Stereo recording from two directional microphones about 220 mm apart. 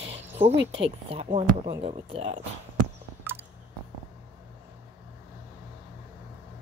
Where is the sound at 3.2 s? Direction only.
10° right (ahead or behind).